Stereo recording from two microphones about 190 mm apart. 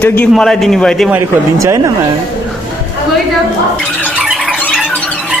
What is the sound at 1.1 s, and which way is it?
Speech, 15° right (ahead or behind).